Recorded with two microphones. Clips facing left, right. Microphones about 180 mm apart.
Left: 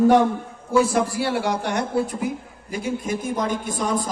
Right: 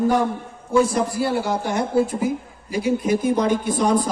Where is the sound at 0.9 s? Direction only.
80° left.